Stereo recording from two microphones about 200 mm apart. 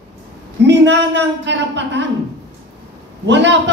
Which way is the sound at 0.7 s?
60° right (ahead or behind).